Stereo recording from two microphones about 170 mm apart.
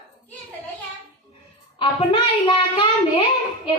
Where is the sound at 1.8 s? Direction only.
30° left (ahead or behind).